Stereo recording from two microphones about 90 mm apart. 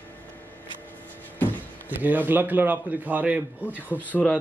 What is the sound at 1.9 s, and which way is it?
A man's voice, 20° right (ahead or behind).